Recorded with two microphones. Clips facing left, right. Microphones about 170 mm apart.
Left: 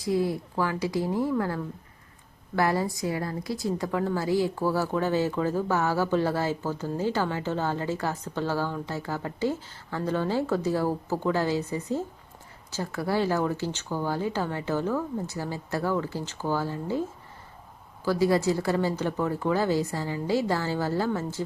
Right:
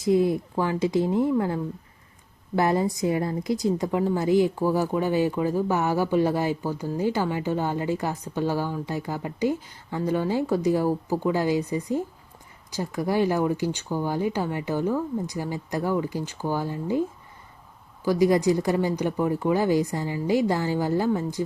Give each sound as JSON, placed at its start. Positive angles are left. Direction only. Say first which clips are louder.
{"t": 0.0, "sound": "a woman's voice", "louder": "right 5 dB", "side_deg": -20}
{"t": 18.0, "sound": "a woman's voice", "louder": "right 3 dB", "side_deg": -15}